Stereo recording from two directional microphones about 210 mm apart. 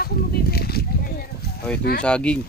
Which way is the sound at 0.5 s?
45° left (ahead or behind).